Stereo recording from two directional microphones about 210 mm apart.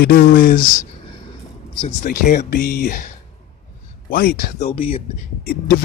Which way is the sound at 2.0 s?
40° left (ahead or behind).